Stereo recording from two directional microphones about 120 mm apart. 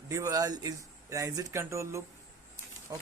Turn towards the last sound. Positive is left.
turn(degrees=-30)  # may be behind; listen again after turning